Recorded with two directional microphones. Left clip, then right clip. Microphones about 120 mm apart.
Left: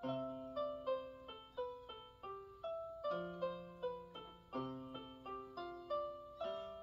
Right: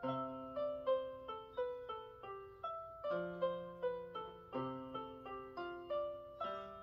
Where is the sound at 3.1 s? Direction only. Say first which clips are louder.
Right 4 dB; 35° right (ahead or behind).